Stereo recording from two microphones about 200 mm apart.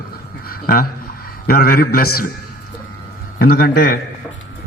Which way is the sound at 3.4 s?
50° left (ahead or behind).